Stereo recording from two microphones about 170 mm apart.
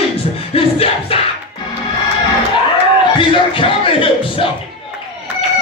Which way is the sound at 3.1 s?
30° left (ahead or behind).